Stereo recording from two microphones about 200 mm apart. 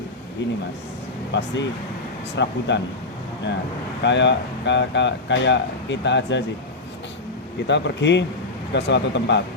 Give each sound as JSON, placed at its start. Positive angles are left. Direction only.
{"t": 0.4, "sound": "speech", "side_deg": 60}
{"t": 4.0, "sound": "speech", "side_deg": 60}
{"t": 7.7, "sound": "speech", "side_deg": 60}